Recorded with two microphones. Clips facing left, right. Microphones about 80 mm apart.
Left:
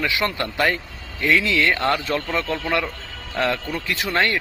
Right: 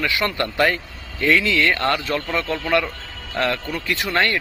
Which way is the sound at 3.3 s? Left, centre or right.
Centre.